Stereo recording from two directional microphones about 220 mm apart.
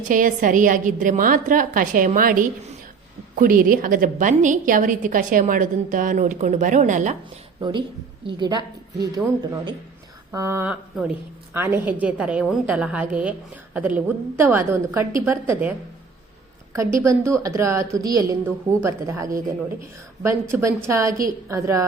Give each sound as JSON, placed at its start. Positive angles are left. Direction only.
{"t": 0.1, "sound": "a woman's voice", "side_deg": -35}
{"t": 7.6, "sound": "a woman's voice", "side_deg": -20}
{"t": 17.0, "sound": "a woman's voice", "side_deg": -10}